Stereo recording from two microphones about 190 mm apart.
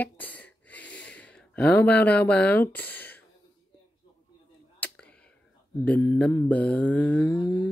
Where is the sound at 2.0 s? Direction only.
5° left (ahead or behind).